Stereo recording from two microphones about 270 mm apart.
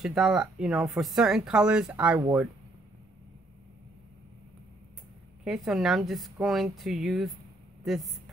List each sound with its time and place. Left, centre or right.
0.0 s speech: centre
5.4 s speech: centre